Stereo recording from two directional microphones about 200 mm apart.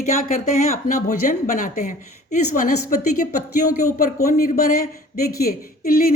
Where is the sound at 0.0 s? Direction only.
35° left (ahead or behind).